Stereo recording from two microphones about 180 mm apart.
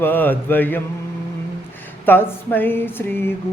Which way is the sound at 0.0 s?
10° left (ahead or behind).